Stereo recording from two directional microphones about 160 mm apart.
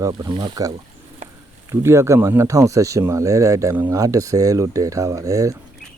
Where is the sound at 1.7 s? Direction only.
15° right (ahead or behind).